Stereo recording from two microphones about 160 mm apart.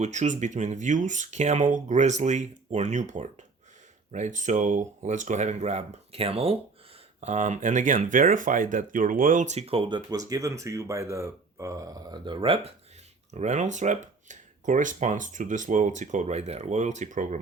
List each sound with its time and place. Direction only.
0.0 s speech: 50° right (ahead or behind)
7.2 s speech: 50° right (ahead or behind)
13.3 s speech: 45° right (ahead or behind)